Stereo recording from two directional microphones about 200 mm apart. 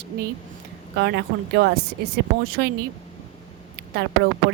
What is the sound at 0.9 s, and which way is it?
A woman's voice, 55° right (ahead or behind).